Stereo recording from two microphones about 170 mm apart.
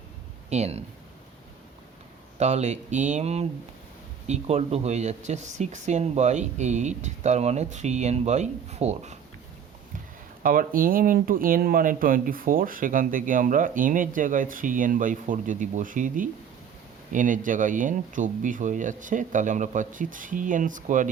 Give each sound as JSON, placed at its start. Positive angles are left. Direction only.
{"t": 0.5, "sound": "speech", "side_deg": -40}
{"t": 2.4, "sound": "speech", "side_deg": -45}
{"t": 10.4, "sound": "speech", "side_deg": -55}